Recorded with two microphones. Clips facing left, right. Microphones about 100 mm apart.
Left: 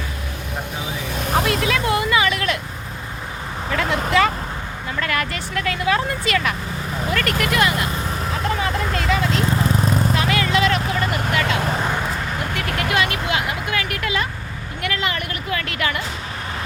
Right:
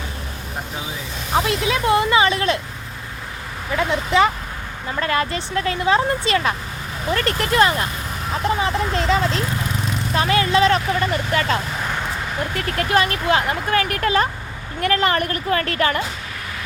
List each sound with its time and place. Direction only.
1.5 s speech: 25° right (ahead or behind)
3.8 s speech: 20° right (ahead or behind); by 11.4 s 35° right (ahead or behind)
12.5 s speech: 40° right (ahead or behind)